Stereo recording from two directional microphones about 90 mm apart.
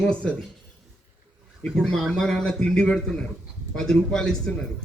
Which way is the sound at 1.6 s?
5° left (ahead or behind).